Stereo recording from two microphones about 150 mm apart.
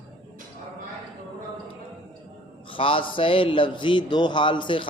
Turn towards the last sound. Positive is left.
turn(degrees=35)  # may be behind; listen again after turning